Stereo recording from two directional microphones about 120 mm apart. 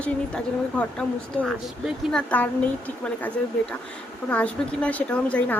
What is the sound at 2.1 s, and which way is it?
Speech, 15° left (ahead or behind).